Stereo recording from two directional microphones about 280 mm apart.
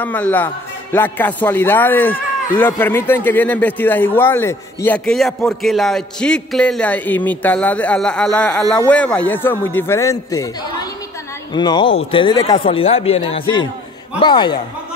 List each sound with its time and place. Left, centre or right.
0.0 s a man's voice: centre